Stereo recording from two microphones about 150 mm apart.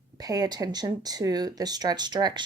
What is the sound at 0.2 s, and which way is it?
Speech, 25° right (ahead or behind).